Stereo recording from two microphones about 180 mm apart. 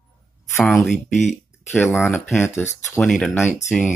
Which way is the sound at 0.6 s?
Centre (ahead or behind).